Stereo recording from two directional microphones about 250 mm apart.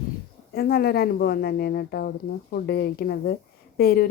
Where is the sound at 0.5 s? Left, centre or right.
Left.